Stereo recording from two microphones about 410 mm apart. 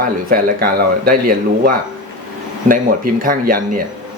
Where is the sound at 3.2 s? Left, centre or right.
Right.